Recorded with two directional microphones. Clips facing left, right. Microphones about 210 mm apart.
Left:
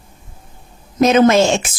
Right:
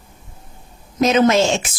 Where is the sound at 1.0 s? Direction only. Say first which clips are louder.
Left 3 dB; 50° left (ahead or behind).